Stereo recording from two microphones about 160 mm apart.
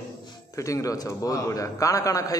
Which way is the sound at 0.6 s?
20° left (ahead or behind).